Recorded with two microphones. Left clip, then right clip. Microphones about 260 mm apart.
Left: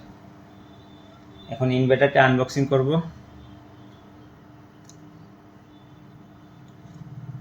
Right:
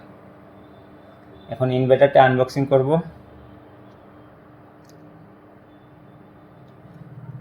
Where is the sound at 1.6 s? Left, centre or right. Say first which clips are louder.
Right 4 dB; centre.